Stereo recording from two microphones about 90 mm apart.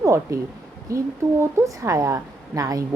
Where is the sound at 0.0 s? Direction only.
35° right (ahead or behind).